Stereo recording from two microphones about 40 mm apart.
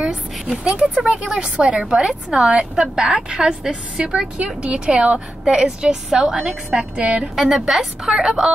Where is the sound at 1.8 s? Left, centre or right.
Centre.